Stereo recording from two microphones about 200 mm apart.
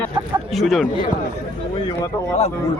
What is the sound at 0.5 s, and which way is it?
Speech, centre (ahead or behind).